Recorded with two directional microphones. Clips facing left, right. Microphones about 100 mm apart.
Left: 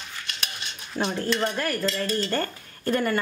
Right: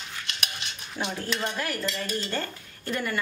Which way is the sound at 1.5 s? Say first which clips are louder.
Left 4 dB; 45° left (ahead or behind).